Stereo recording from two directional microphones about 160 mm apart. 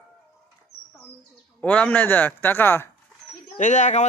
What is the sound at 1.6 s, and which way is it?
Speech, 10° left (ahead or behind).